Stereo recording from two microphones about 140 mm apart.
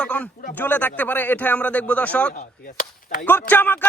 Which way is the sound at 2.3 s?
60° left (ahead or behind).